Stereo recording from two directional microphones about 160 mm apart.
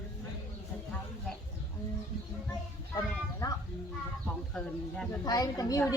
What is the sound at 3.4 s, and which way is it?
Speech, 25° left (ahead or behind).